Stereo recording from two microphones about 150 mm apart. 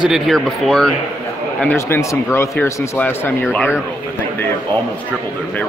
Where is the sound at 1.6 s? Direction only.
15° left (ahead or behind).